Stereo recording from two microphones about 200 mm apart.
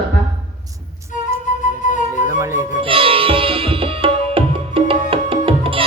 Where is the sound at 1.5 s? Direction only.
40° left (ahead or behind).